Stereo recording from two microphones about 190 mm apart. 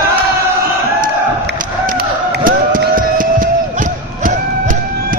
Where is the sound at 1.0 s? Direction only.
45° right (ahead or behind).